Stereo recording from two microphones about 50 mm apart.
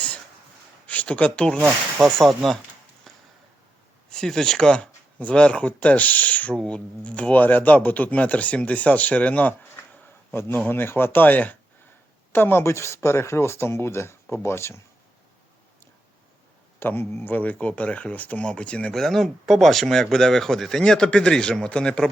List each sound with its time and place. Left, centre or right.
1.0 s a man's voice: left
2.1 s speech: centre
4.1 s a man's voice: centre; by 6.5 s left
6.5 s a man's voice: centre; by 9.8 s left
10.7 s speech: left
12.3 s speech: left
12.6 s speech: left
16.8 s a man's voice: left
18.9 s a man's voice: centre